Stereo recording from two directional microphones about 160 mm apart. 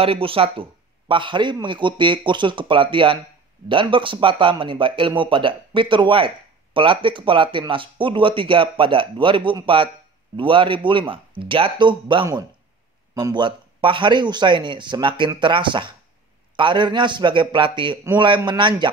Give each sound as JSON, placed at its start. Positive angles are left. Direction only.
{"t": 0.0, "sound": "speech", "side_deg": -35}